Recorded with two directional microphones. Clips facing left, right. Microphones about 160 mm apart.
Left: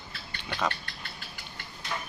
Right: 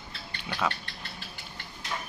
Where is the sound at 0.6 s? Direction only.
5° right (ahead or behind).